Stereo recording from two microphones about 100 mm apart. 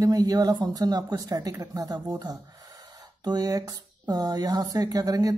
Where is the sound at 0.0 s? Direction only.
40° right (ahead or behind).